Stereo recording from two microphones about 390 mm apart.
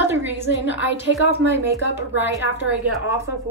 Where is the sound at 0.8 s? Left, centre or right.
Right.